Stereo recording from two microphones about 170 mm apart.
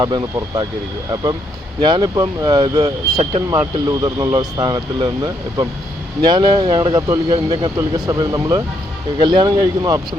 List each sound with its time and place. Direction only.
0.0 s speech: 20° right (ahead or behind)